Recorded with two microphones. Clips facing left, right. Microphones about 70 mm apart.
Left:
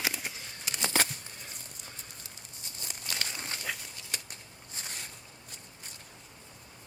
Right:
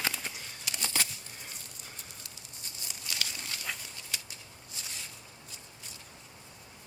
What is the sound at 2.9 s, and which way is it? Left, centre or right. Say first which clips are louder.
Crumpling: left 1 dB; left.